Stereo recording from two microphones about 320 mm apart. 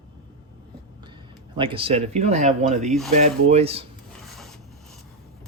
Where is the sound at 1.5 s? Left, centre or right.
Centre.